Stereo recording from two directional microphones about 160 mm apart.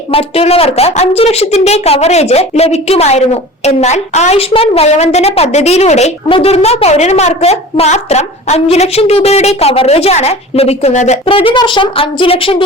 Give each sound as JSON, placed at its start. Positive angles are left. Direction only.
{"t": 0.1, "sound": "a woman's voice", "side_deg": 40}
{"t": 11.3, "sound": "a woman's voice", "side_deg": 35}